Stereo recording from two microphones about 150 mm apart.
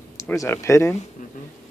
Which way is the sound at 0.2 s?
20° left (ahead or behind).